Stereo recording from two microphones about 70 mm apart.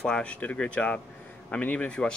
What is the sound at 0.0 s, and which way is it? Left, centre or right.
Speech, centre.